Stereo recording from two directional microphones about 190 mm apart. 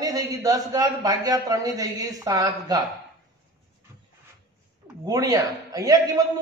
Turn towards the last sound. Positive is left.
turn(degrees=-20)  # may be behind; listen again after turning